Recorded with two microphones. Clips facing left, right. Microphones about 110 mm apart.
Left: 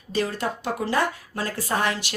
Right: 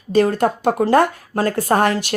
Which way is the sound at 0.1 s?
50° right (ahead or behind).